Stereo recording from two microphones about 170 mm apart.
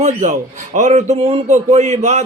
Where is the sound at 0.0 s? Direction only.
45° right (ahead or behind).